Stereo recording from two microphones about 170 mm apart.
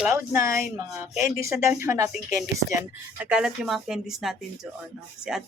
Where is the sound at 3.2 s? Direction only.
5° right (ahead or behind).